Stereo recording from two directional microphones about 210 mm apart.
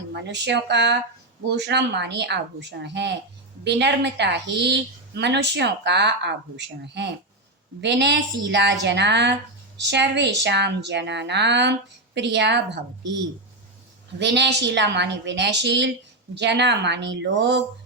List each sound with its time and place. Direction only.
0.1 s a woman's voice: 55° right (ahead or behind)
14.2 s a woman's voice: 55° right (ahead or behind)